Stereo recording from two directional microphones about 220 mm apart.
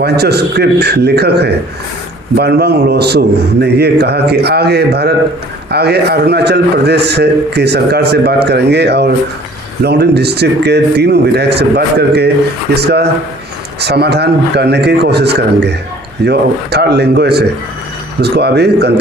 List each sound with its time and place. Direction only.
0.0 s a man's voice: 45° right (ahead or behind)